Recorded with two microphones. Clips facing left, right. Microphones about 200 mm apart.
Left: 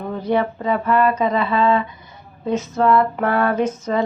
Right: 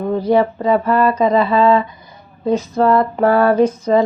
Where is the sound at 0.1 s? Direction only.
35° right (ahead or behind).